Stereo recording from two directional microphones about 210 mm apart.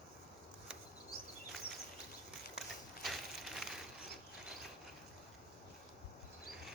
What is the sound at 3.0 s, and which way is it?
Crushing, centre (ahead or behind).